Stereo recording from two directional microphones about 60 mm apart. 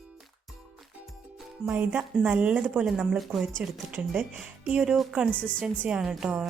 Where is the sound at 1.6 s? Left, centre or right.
Right.